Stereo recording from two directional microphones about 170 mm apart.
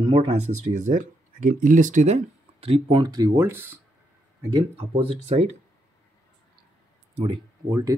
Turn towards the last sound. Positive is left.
turn(degrees=-20)  # may be behind; listen again after turning